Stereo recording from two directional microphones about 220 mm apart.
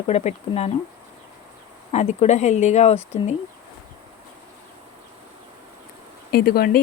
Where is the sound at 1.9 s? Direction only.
30° left (ahead or behind).